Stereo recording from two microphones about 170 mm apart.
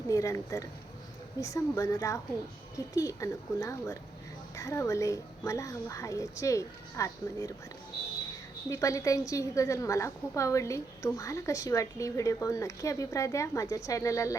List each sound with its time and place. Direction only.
0.1 s a woman's voice: 20° left (ahead or behind)
8.7 s a woman's voice: 20° left (ahead or behind)